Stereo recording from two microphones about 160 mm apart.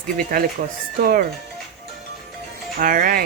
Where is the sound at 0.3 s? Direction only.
70° right (ahead or behind).